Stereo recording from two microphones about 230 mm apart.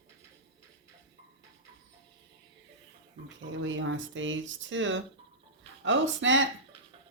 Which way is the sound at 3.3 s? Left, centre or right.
Right.